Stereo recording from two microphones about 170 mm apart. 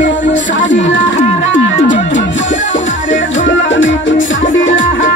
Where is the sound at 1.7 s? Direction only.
45° left (ahead or behind).